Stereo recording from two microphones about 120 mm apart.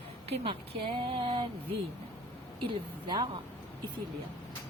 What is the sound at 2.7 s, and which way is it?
Speech, 40° right (ahead or behind).